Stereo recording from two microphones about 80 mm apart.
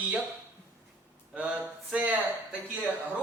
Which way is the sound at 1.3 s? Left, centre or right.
Centre.